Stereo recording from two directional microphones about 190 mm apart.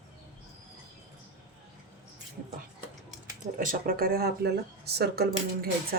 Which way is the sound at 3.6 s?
45° right (ahead or behind).